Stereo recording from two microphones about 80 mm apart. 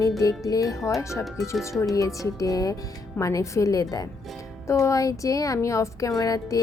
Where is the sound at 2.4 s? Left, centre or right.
Left.